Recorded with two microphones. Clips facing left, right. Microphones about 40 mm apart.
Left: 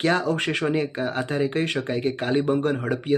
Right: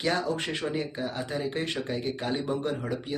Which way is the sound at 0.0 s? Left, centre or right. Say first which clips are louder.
Left 6 dB; left.